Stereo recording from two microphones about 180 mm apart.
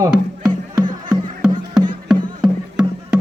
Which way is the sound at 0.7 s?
25° right (ahead or behind).